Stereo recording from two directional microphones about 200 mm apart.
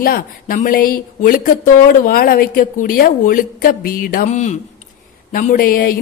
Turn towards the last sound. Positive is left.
turn(degrees=45)  # may be behind; listen again after turning